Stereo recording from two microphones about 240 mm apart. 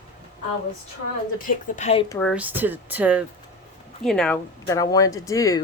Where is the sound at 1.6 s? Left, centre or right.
Left.